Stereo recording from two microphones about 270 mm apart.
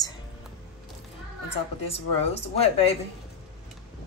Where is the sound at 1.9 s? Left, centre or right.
Left.